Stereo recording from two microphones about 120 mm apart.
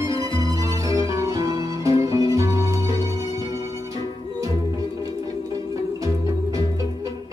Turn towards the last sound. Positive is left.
turn(degrees=-25)  # may be behind; listen again after turning